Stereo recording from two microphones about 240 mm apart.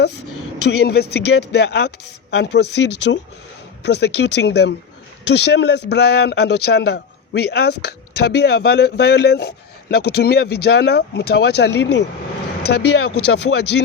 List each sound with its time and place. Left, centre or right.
0.6 s a man's voice: left